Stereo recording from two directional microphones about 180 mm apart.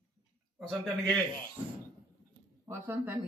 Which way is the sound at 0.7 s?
5° left (ahead or behind).